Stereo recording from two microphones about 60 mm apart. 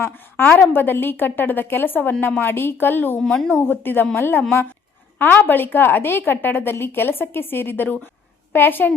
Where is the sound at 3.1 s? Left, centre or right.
Centre.